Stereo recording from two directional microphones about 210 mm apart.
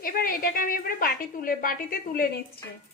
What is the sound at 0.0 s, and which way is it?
A woman's voice, 45° left (ahead or behind).